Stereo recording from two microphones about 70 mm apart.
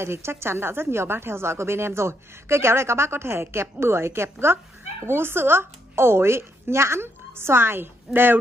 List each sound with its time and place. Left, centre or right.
0.0 s a woman's voice: right